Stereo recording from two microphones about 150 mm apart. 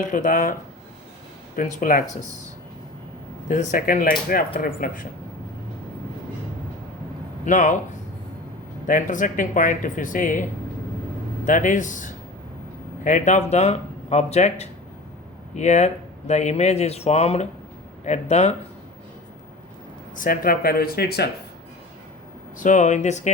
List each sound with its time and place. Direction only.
0.0 s speech: 60° left (ahead or behind)
1.5 s speech: 60° left (ahead or behind)
3.5 s speech: 60° left (ahead or behind)
7.4 s speech: 55° left (ahead or behind)
8.9 s speech: 60° left (ahead or behind)
11.4 s speech: 60° left (ahead or behind)
20.1 s speech: 65° left (ahead or behind); by 21.2 s 90° left
22.5 s speech: 55° left (ahead or behind)